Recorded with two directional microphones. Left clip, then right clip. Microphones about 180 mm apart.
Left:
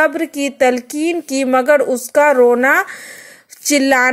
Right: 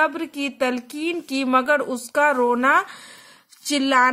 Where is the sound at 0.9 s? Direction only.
50° left (ahead or behind).